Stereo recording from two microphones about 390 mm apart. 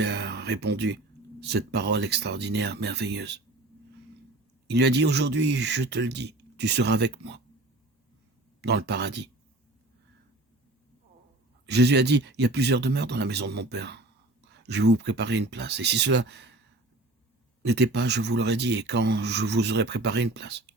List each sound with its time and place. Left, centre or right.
0.0 s speech: right
4.7 s speech: right
8.6 s speech: right
11.6 s speech: right
17.6 s speech: right